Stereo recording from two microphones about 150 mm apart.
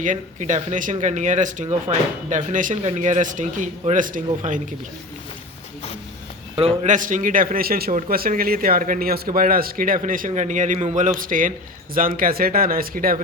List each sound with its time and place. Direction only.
0.0 s speech: 55° right (ahead or behind)
6.6 s speech: 50° right (ahead or behind); by 13.1 s 75° right (ahead or behind)